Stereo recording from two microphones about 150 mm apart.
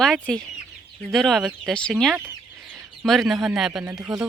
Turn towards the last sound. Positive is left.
turn(degrees=-5)  # may be behind; listen again after turning